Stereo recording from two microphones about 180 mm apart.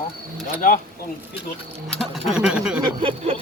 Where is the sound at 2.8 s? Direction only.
30° right (ahead or behind).